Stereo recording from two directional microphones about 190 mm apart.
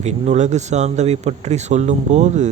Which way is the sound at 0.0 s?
35° right (ahead or behind).